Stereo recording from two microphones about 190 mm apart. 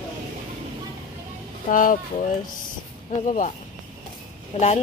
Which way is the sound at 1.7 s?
45° left (ahead or behind).